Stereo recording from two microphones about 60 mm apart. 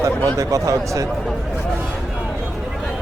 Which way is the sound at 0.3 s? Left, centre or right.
Right.